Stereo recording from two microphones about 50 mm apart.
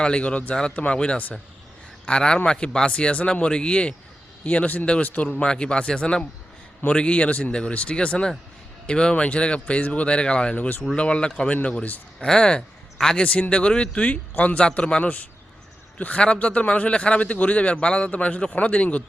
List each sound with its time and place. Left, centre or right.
0.0 s a man's voice: left
12.2 s speech: centre
13.2 s a man's voice: left